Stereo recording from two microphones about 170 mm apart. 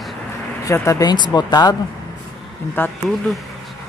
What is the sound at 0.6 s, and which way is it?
Speech, 20° left (ahead or behind).